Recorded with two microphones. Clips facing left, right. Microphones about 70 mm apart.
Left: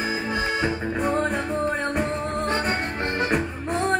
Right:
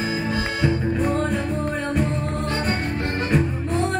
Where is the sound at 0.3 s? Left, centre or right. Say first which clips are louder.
Right 1 dB; left.